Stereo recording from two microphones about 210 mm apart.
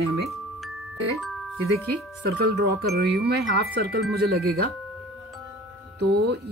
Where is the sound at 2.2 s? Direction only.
50° right (ahead or behind).